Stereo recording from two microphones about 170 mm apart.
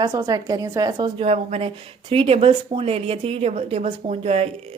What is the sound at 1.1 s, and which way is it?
A woman's voice, 40° right (ahead or behind).